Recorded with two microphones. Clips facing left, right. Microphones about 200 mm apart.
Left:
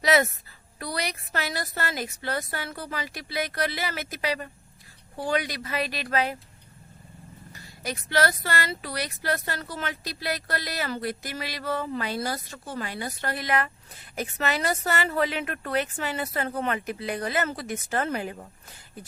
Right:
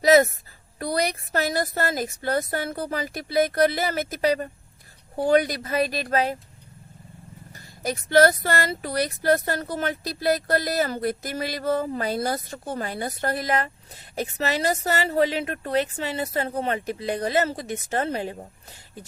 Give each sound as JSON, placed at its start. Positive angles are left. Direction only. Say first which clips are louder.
{"t": 0.0, "sound": "speech", "louder": "right 6 dB", "side_deg": -45}
{"t": 7.5, "sound": "speech", "louder": "right 5 dB", "side_deg": -45}